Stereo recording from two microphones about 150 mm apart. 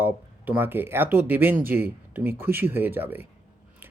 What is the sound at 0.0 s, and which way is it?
Speech, 10° right (ahead or behind).